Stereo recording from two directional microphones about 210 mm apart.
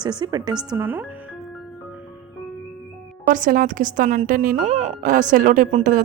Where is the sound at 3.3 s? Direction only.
40° right (ahead or behind).